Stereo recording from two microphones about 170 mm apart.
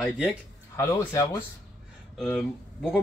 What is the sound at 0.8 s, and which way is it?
Speech, 15° left (ahead or behind).